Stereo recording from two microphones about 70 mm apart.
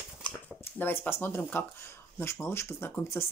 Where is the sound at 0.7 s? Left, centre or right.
Left.